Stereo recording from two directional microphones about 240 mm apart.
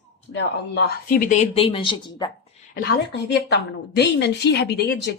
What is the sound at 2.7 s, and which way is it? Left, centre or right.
A woman's voice, left.